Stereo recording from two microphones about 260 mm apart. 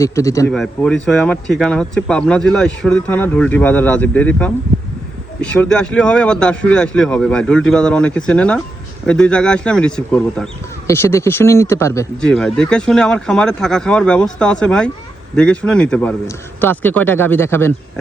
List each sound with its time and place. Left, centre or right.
0.0 s a man's voice: centre